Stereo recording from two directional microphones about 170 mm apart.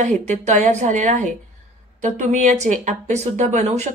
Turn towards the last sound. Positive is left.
turn(degrees=-40)  # may be behind; listen again after turning